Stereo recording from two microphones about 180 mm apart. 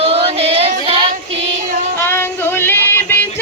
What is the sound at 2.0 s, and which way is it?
Child singing, 10° left (ahead or behind).